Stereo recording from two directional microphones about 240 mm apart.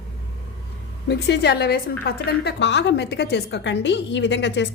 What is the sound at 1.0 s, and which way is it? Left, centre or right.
A woman's voice, left.